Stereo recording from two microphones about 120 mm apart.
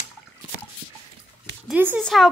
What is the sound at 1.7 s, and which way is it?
Speech, 15° right (ahead or behind).